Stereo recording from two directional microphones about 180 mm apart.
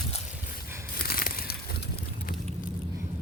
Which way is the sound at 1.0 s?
55° left (ahead or behind).